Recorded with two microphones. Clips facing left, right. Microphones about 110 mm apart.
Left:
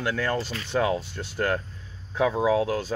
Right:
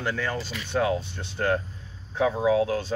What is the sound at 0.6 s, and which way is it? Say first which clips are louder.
Speech: right 1 dB; 20° right (ahead or behind).